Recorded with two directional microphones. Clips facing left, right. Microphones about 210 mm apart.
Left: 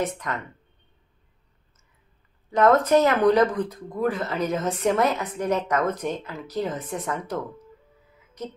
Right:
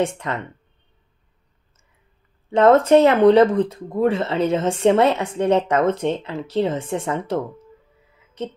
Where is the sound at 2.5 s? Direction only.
30° right (ahead or behind).